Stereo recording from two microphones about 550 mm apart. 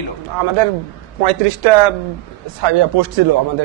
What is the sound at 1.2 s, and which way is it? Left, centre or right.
Speech, right.